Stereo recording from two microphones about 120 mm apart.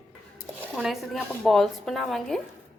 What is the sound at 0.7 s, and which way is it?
Speech, 5° right (ahead or behind).